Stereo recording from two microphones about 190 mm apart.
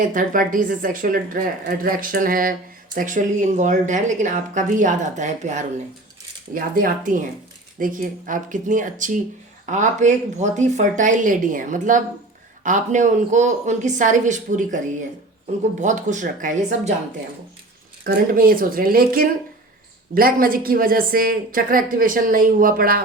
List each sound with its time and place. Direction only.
0.0 s a woman's voice: 45° right (ahead or behind)
15.8 s a woman's voice: 40° right (ahead or behind)
18.0 s a woman's voice: 50° right (ahead or behind)